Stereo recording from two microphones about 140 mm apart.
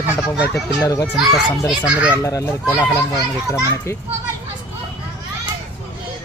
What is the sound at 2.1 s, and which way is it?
Speech, 20° left (ahead or behind).